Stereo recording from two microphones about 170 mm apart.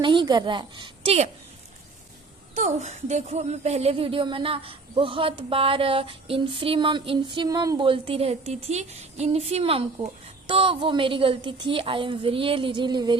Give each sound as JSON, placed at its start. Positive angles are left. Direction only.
{"t": 0.0, "sound": "a woman's voice", "side_deg": -30}
{"t": 2.6, "sound": "speech", "side_deg": -40}